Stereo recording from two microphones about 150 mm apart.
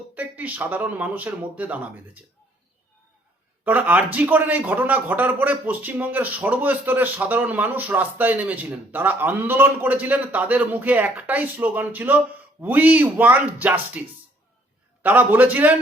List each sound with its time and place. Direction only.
0.1 s speech: 10° right (ahead or behind)
3.6 s a man's voice: 10° right (ahead or behind)
15.0 s a man's voice: 10° right (ahead or behind)